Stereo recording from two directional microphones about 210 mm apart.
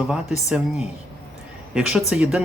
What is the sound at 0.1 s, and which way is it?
Speech, 5° right (ahead or behind).